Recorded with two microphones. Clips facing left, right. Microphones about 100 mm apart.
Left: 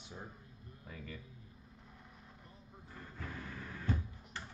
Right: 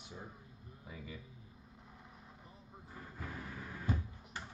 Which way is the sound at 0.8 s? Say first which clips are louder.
Even; 10° right (ahead or behind).